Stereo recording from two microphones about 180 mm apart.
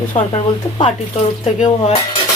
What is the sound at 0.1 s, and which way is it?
Speech, 40° left (ahead or behind).